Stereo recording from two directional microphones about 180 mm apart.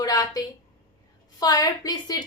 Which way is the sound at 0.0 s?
20° left (ahead or behind).